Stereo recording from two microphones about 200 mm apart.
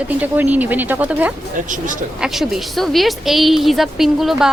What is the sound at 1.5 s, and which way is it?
Speech, 40° right (ahead or behind).